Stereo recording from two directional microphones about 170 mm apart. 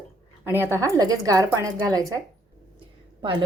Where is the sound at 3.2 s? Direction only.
25° right (ahead or behind).